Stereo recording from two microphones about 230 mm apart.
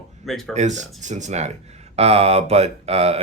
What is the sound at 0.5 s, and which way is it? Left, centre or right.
Speech, right.